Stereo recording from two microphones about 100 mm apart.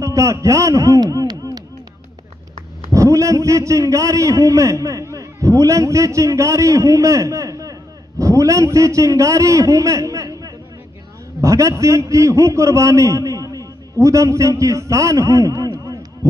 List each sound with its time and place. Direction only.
0.0 s a man's voice: 30° right (ahead or behind)
2.9 s a man's voice: 30° right (ahead or behind)